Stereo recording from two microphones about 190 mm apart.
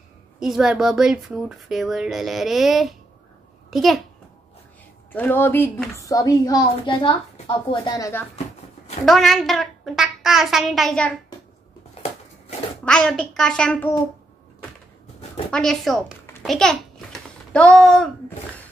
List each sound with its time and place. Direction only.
0.4 s speech: centre (ahead or behind)
5.1 s a woman's voice: 10° left (ahead or behind)
9.0 s speech: centre (ahead or behind)
12.8 s speech: 5° left (ahead or behind)
15.5 s speech: centre (ahead or behind)
16.4 s babbling: centre (ahead or behind)